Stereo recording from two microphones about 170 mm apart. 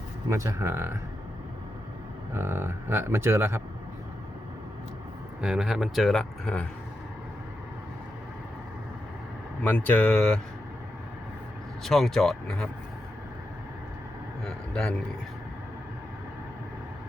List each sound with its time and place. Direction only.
0.3 s speech: 20° right (ahead or behind)
2.3 s speech: 15° right (ahead or behind)
5.4 s speech: 5° right (ahead or behind)
9.6 s speech: 10° left (ahead or behind)
11.8 s speech: centre (ahead or behind)
14.4 s vehicle: 5° left (ahead or behind)